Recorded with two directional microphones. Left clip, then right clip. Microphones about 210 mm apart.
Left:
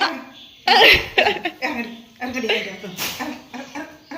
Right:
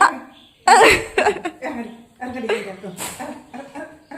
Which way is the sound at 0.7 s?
30° right (ahead or behind).